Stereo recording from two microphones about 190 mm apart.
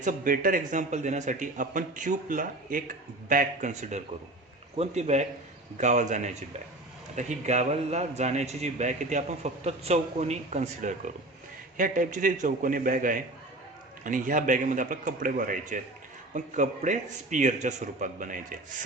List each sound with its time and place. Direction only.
0.0 s a man's voice: 45° right (ahead or behind)